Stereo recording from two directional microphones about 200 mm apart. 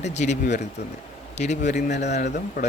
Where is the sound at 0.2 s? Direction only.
35° left (ahead or behind).